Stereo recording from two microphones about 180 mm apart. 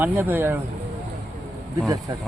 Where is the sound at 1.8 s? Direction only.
20° right (ahead or behind).